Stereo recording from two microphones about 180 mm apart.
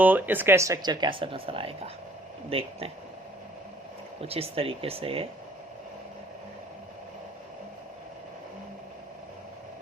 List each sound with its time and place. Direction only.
0.0 s speech: 10° right (ahead or behind); by 2.9 s 30° right (ahead or behind)
4.2 s speech: 35° right (ahead or behind)